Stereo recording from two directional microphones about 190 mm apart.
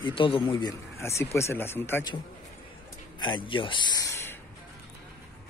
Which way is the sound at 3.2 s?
25° left (ahead or behind).